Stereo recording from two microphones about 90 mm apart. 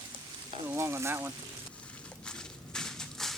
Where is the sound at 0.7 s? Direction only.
30° right (ahead or behind).